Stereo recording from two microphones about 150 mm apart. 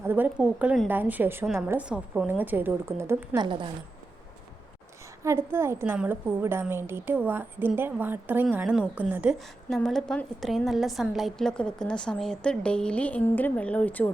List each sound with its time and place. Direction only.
0.0 s a woman's voice: 10° right (ahead or behind)
3.3 s speech: 30° right (ahead or behind)
5.2 s a woman's voice: 15° right (ahead or behind)
9.6 s a woman's voice: centre (ahead or behind)